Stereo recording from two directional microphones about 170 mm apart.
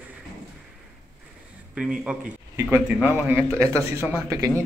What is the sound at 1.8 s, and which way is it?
Speech, 5° right (ahead or behind).